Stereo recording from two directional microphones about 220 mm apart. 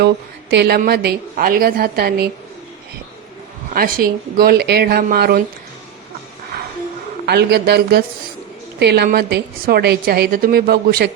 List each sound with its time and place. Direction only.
0.5 s a woman's voice: 45° right (ahead or behind)
3.7 s a woman's voice: 40° right (ahead or behind)
7.3 s a woman's voice: 50° right (ahead or behind)